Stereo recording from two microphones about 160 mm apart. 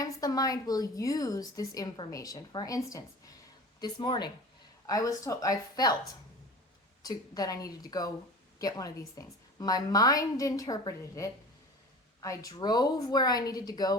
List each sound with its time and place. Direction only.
0.0 s a woman's voice: 25° left (ahead or behind)
7.0 s a woman's voice: 25° left (ahead or behind)